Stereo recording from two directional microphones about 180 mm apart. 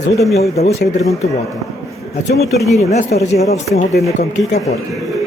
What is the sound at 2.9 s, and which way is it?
Speech, 40° left (ahead or behind).